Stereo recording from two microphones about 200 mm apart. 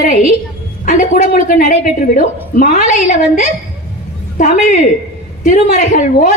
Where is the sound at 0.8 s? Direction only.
40° left (ahead or behind).